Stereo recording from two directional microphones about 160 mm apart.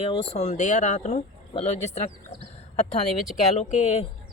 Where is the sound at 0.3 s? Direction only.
45° left (ahead or behind).